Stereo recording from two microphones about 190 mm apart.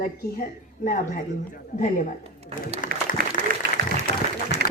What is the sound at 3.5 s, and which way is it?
Applause, 45° right (ahead or behind).